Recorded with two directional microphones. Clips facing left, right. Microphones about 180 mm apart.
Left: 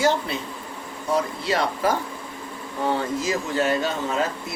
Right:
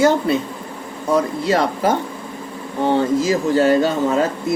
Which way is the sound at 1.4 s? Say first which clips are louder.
Right 6 dB; 40° right (ahead or behind).